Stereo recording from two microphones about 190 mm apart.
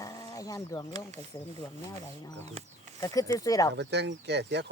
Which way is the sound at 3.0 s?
15° left (ahead or behind).